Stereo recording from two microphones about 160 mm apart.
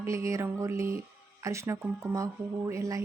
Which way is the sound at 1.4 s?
20° right (ahead or behind).